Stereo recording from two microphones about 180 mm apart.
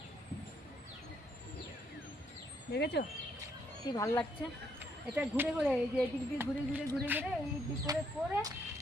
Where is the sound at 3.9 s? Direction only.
15° left (ahead or behind).